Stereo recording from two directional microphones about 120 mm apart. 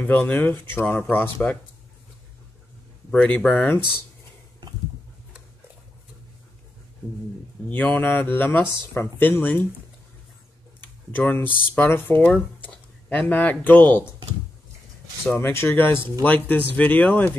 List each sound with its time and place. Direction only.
0.3 s speech: 15° left (ahead or behind)
3.1 s speech: 10° left (ahead or behind)
7.6 s speech: 15° left (ahead or behind)
10.8 s speech: 15° left (ahead or behind)
15.2 s speech: 20° left (ahead or behind)